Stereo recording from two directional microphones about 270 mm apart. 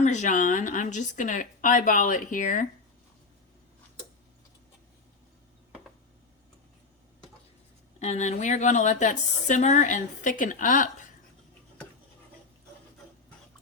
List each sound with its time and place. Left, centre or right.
0.0 s a woman's voice: left
7.9 s a woman's voice: left